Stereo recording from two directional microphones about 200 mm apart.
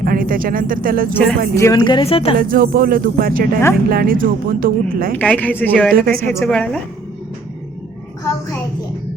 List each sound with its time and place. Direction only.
0.0 s speech: 45° right (ahead or behind)
1.1 s a woman's voice: centre (ahead or behind)
1.5 s speech: 15° left (ahead or behind)
2.4 s speech: 45° right (ahead or behind)
5.1 s a woman's voice: 5° left (ahead or behind)
5.9 s speech: 45° right (ahead or behind)
6.4 s a woman's voice: 5° left (ahead or behind)